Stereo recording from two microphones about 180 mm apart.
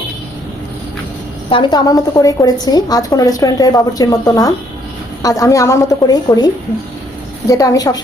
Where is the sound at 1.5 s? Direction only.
25° left (ahead or behind).